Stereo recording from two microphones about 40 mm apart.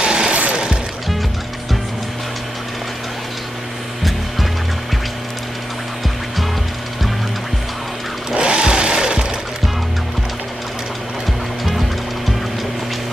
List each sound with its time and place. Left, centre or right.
0.0 s a sound: right
0.5 s music: centre
8.3 s sewing machine: right